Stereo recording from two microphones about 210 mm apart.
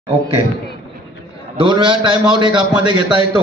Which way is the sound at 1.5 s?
20° right (ahead or behind).